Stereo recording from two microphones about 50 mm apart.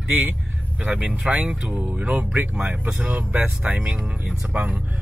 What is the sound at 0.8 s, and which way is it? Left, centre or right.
Speech, right.